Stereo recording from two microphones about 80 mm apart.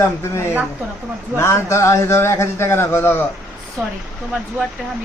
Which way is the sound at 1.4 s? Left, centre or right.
Left.